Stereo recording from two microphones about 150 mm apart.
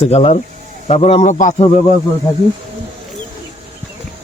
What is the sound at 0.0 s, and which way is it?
A man's voice, 45° left (ahead or behind).